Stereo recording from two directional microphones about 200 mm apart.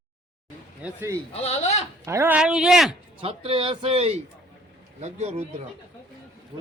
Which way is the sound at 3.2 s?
25° right (ahead or behind).